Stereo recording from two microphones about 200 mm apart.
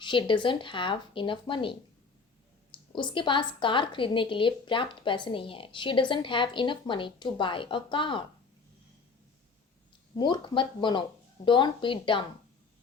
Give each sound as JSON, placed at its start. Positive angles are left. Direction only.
{"t": 0.0, "sound": "a woman's voice", "side_deg": 25}
{"t": 2.9, "sound": "a woman's voice", "side_deg": 25}
{"t": 10.2, "sound": "a woman's voice", "side_deg": 25}